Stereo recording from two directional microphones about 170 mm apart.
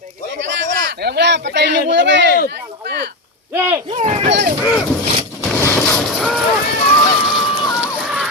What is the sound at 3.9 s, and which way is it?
Speech, 35° right (ahead or behind).